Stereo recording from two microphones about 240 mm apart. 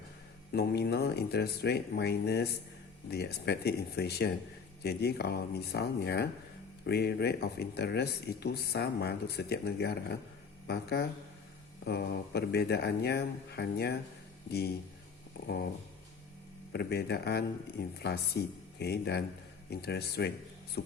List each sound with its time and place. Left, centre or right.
0.5 s speech: left
16.7 s speech: left
20.8 s beatboxing: left